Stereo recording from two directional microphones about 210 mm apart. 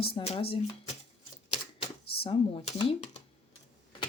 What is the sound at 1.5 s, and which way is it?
Typewriter, 25° left (ahead or behind).